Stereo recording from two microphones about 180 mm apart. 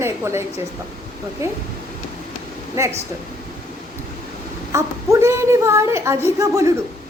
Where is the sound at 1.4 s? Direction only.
15° right (ahead or behind).